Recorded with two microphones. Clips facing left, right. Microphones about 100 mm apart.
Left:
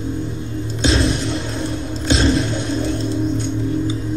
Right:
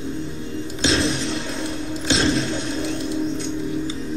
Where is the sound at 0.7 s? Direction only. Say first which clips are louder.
Left 3 dB; centre (ahead or behind).